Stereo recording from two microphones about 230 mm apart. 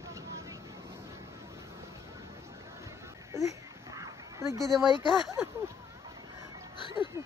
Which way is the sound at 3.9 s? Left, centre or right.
Centre.